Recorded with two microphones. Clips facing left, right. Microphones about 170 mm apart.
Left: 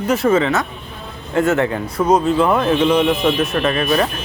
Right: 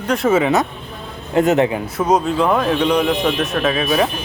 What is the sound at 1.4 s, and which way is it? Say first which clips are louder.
Speech: right 2 dB; 20° right (ahead or behind).